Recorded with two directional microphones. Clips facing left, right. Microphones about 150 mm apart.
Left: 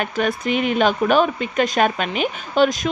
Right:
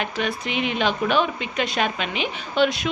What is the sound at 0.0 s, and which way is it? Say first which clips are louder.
A woman's voice: left 5 dB; 45° left (ahead or behind).